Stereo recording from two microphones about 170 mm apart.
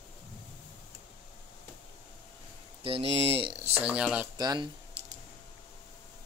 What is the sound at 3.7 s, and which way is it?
Speech, 5° right (ahead or behind).